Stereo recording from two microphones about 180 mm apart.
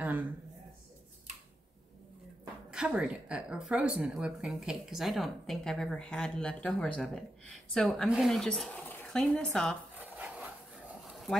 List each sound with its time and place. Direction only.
0.0 s a sound: 10° right (ahead or behind)
2.7 s speech: 5° right (ahead or behind)
9.9 s dog: 10° right (ahead or behind)